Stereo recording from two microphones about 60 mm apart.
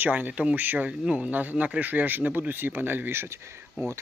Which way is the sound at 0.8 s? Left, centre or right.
Centre.